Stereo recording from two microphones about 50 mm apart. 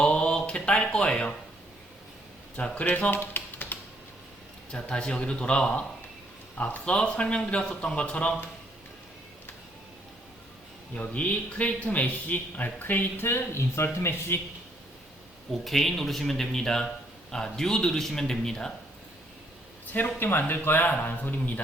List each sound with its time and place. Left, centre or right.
0.0 s a sound: left
2.6 s speech: left
3.1 s typing: left
4.7 s speech: centre
6.8 s speech: left
10.9 s speech: left
12.8 s speech: left
13.2 s speech: left
15.5 s speech: centre
20.1 s speech: left